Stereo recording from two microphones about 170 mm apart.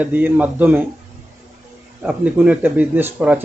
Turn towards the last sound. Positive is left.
turn(degrees=-10)  # may be behind; listen again after turning